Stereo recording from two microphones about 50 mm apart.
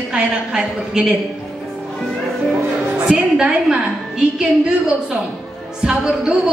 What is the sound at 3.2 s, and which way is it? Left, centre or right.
Music, centre.